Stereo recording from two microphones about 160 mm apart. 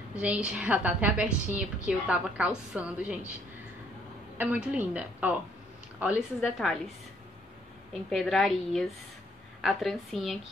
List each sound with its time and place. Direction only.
0.2 s a woman's voice: 5° right (ahead or behind)
4.4 s a woman's voice: 10° right (ahead or behind)
7.9 s a woman's voice: centre (ahead or behind)